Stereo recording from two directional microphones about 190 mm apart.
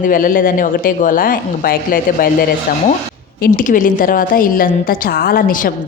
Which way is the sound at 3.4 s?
45° left (ahead or behind).